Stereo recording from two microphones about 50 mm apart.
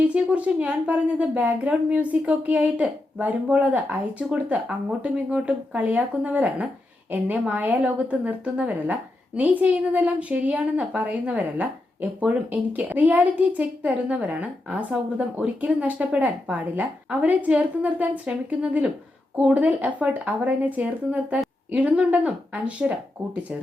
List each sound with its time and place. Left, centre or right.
0.3 s a woman's voice: right
7.1 s a woman's voice: right
7.4 s speech: right
9.6 s a woman's voice: right
10.0 s a woman's voice: right